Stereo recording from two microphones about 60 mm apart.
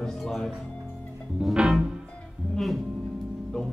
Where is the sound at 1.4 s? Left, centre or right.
Centre.